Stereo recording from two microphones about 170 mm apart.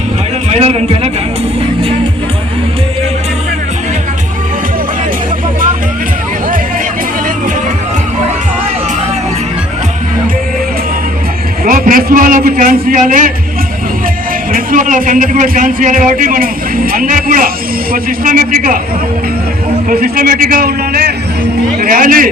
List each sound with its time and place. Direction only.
0.5 s a man's voice: 40° right (ahead or behind)
11.6 s a man's voice: 55° right (ahead or behind)
14.5 s a man's voice: 55° right (ahead or behind)
19.9 s a man's voice: 55° right (ahead or behind)